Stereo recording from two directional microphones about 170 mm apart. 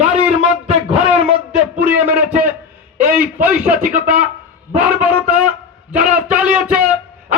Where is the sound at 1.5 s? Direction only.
10° right (ahead or behind).